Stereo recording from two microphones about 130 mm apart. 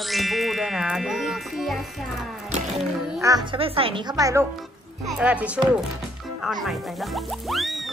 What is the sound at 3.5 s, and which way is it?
Speech, 45° right (ahead or behind).